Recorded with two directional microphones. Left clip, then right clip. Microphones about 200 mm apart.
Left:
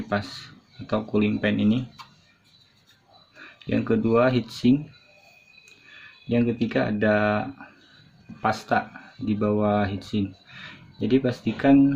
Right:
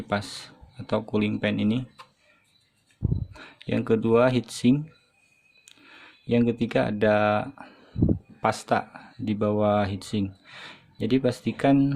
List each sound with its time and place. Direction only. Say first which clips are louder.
0.1 s speech: even; 50° right (ahead or behind)
3.3 s speech: left 3 dB; 50° right (ahead or behind)
6.2 s speech: even; 50° right (ahead or behind)